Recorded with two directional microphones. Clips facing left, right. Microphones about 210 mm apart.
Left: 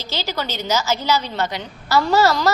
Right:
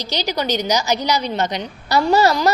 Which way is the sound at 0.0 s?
15° right (ahead or behind).